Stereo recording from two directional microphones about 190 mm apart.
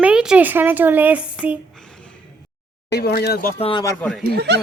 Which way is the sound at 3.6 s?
30° left (ahead or behind).